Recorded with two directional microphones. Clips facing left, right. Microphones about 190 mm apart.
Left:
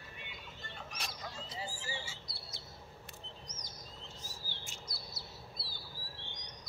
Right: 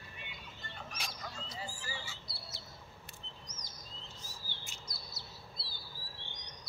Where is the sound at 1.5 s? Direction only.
25° left (ahead or behind).